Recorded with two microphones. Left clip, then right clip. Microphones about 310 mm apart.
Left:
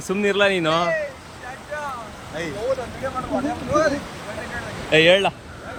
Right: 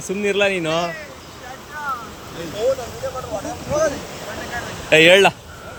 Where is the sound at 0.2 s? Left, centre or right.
Centre.